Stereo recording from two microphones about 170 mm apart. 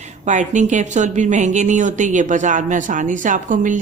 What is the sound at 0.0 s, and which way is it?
Speech, 45° right (ahead or behind).